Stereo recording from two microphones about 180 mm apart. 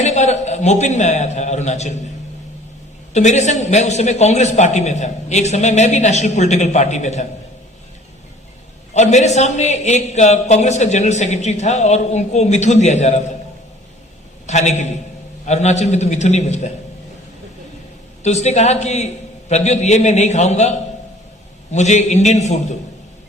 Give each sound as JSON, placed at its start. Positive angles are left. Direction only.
{"t": 0.0, "sound": "a man's voice", "side_deg": 40}
{"t": 3.1, "sound": "a man's voice", "side_deg": 40}
{"t": 8.9, "sound": "a man's voice", "side_deg": 40}
{"t": 14.4, "sound": "a man's voice", "side_deg": 40}
{"t": 18.2, "sound": "a man's voice", "side_deg": 40}